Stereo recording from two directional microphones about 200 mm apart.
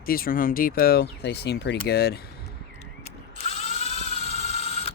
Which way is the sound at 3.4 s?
30° left (ahead or behind).